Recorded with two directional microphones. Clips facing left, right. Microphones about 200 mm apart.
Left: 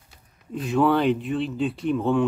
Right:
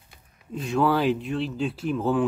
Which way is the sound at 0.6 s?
Centre (ahead or behind).